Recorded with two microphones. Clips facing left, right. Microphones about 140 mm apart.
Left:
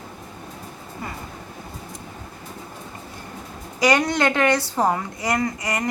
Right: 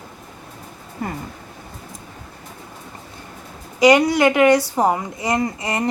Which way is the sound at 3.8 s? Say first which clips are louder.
Right 6 dB; 15° right (ahead or behind).